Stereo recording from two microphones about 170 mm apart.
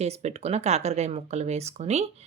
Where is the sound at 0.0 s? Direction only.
40° right (ahead or behind).